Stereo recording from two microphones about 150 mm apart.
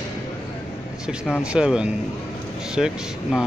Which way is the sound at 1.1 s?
5° right (ahead or behind).